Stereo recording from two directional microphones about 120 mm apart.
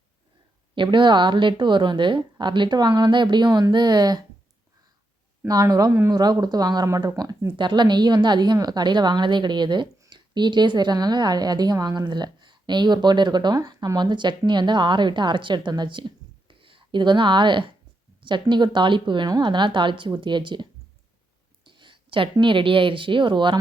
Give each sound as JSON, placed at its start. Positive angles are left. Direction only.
{"t": 0.8, "sound": "a woman's voice", "side_deg": -40}
{"t": 5.5, "sound": "a woman's voice", "side_deg": -30}